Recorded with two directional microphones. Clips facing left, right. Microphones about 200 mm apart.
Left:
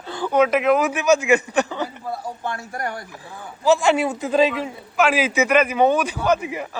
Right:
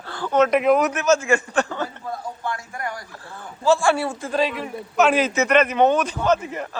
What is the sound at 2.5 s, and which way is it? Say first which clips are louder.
Speech: left 3 dB; 40° left (ahead or behind).